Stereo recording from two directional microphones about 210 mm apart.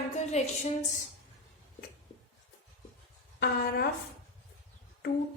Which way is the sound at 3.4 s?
50° left (ahead or behind).